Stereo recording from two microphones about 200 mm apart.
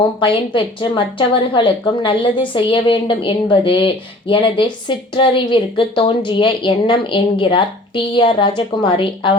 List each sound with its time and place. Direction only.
0.2 s a woman's voice: 25° left (ahead or behind)